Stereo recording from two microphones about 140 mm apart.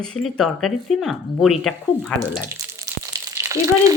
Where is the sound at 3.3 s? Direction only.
20° right (ahead or behind).